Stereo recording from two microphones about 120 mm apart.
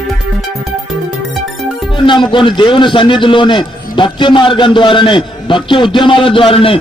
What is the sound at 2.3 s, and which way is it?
A man's voice, 45° left (ahead or behind).